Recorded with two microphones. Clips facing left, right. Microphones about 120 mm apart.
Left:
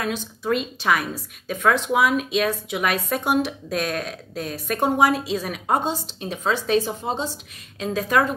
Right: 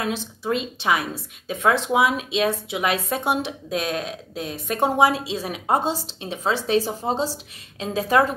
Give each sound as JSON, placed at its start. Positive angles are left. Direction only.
{"t": 0.0, "sound": "a woman's voice", "side_deg": -30}